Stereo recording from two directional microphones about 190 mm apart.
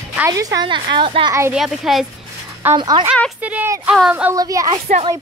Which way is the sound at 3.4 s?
10° right (ahead or behind).